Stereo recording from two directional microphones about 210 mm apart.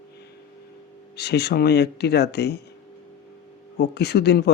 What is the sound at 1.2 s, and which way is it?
Speech, 50° left (ahead or behind).